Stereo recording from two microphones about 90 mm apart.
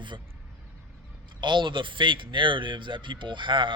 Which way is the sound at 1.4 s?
65° right (ahead or behind).